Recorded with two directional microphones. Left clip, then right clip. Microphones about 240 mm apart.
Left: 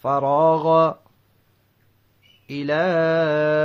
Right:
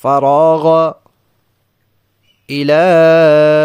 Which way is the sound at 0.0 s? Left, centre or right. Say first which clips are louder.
Right 8 dB; right.